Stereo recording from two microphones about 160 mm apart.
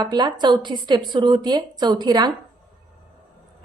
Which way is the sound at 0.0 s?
25° right (ahead or behind).